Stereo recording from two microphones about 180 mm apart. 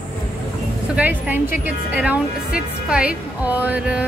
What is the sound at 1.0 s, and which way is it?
A woman's voice, 10° right (ahead or behind).